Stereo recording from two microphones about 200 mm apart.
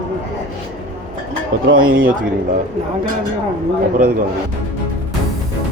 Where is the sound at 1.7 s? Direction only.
45° right (ahead or behind).